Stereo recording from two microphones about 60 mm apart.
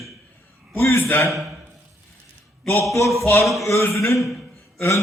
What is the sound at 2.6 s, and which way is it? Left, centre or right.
Speech, left.